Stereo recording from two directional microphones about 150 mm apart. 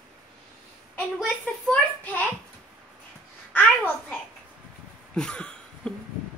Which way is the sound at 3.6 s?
10° left (ahead or behind).